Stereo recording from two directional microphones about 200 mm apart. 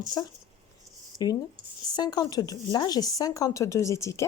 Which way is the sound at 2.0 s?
20° left (ahead or behind).